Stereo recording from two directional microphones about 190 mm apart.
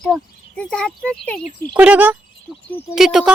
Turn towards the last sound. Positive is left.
turn(degrees=-5)  # may be behind; listen again after turning